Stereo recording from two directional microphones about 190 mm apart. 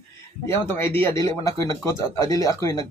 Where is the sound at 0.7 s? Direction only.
10° left (ahead or behind).